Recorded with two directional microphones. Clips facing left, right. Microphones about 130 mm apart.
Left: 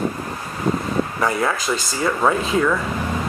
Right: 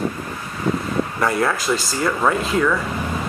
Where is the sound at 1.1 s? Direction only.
Centre (ahead or behind).